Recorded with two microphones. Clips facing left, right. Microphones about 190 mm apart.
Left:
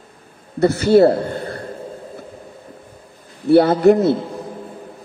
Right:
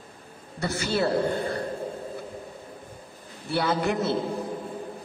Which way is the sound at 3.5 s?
40° left (ahead or behind).